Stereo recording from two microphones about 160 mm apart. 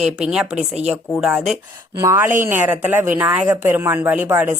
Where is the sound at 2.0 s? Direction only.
15° right (ahead or behind).